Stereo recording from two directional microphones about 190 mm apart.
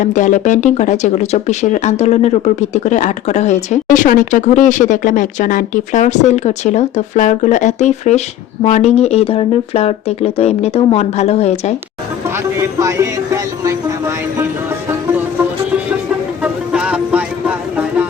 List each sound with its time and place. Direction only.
0.0 s speech: 40° left (ahead or behind)
12.5 s music: 15° right (ahead or behind)
16.4 s a sound: 5° right (ahead or behind)